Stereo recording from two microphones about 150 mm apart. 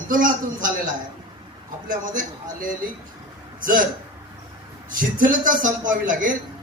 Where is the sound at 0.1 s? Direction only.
65° right (ahead or behind).